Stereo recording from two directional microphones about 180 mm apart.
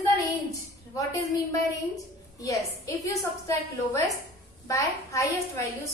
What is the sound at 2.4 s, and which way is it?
A woman's voice, 20° left (ahead or behind).